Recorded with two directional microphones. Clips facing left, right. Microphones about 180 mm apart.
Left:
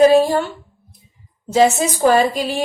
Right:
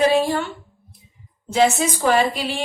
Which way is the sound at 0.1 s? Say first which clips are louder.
Left 5 dB; 40° left (ahead or behind).